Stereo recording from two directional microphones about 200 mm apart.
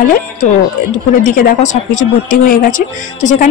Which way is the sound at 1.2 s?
40° left (ahead or behind).